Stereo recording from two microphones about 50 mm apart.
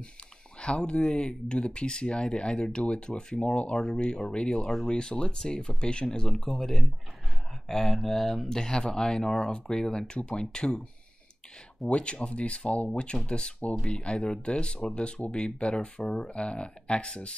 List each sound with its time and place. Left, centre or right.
0.6 s speech: left
6.3 s speech: centre
11.9 s speech: left